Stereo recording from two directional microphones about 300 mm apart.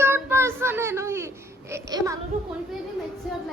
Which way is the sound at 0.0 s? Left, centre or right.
Centre.